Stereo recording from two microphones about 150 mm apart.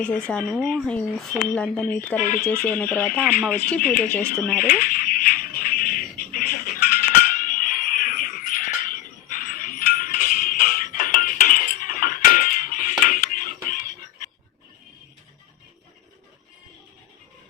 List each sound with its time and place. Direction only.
0.0 s speech: 10° left (ahead or behind)
3.8 s speech: 70° left (ahead or behind)
4.0 s speech: 10° left (ahead or behind)
4.6 s a sound: 65° left (ahead or behind)